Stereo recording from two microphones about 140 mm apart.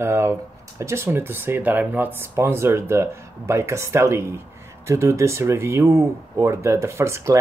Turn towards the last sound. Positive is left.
turn(degrees=-20)  # may be behind; listen again after turning